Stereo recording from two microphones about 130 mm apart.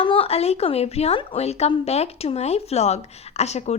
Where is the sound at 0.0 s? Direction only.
45° left (ahead or behind).